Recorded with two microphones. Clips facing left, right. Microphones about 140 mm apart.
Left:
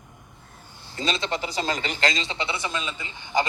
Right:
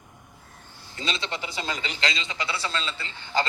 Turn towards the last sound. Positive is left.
turn(degrees=15)  # may be behind; listen again after turning